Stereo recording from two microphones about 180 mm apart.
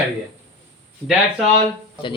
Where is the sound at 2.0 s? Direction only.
25° left (ahead or behind).